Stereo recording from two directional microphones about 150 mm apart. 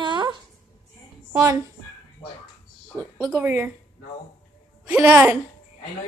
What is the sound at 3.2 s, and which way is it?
Speech, 15° right (ahead or behind).